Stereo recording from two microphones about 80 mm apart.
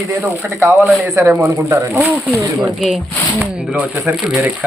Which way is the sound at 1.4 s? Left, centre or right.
Right.